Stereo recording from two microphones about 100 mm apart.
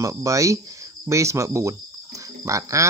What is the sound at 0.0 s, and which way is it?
Speech, 30° right (ahead or behind).